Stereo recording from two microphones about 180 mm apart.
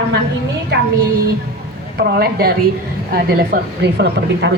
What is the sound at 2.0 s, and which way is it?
A woman's voice, 60° right (ahead or behind).